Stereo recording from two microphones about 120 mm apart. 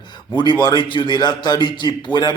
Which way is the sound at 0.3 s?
40° left (ahead or behind).